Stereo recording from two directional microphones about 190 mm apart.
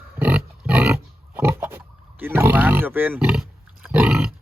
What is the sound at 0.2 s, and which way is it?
Pig, 10° right (ahead or behind).